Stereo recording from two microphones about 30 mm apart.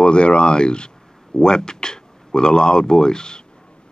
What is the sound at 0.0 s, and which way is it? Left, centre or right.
Speech, left.